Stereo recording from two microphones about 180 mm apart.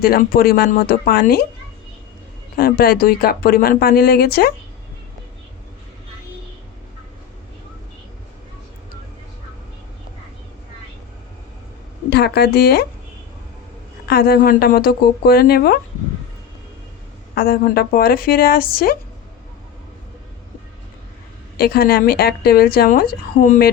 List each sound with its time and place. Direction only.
0.0 s a woman's voice: 55° left (ahead or behind)
2.6 s a woman's voice: 55° left (ahead or behind)
12.1 s a woman's voice: 65° left (ahead or behind)
14.1 s a woman's voice: 60° left (ahead or behind)
17.3 s a woman's voice: 55° left (ahead or behind)
21.6 s a woman's voice: 55° left (ahead or behind)